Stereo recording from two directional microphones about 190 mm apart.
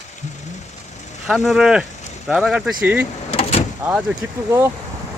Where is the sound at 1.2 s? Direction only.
Centre (ahead or behind).